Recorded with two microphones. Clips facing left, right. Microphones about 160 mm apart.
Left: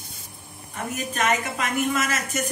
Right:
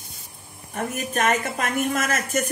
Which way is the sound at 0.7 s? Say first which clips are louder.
Right 3 dB; 50° right (ahead or behind).